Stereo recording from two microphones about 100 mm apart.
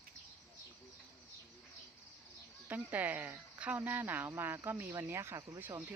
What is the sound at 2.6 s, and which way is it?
Speech, 15° right (ahead or behind).